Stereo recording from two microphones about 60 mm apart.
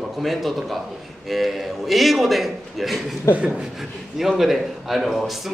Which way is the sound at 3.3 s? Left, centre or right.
Right.